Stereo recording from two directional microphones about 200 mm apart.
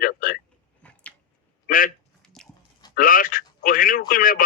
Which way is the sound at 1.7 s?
45° left (ahead or behind).